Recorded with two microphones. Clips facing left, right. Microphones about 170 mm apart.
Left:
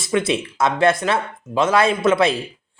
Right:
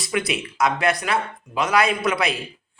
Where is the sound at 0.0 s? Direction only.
25° left (ahead or behind).